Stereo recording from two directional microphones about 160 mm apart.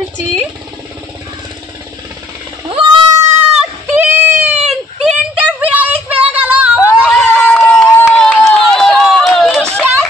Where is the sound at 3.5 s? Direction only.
10° right (ahead or behind).